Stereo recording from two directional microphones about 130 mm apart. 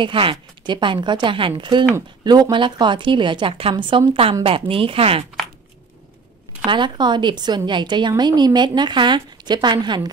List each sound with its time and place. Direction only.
0.0 s a woman's voice: 40° right (ahead or behind)
6.6 s speech: 40° right (ahead or behind)